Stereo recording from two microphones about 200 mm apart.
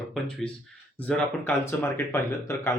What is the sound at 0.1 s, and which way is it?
A man's voice, centre (ahead or behind).